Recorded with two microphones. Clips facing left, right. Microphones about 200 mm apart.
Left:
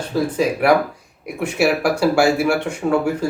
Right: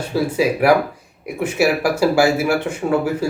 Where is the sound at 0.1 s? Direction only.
5° right (ahead or behind).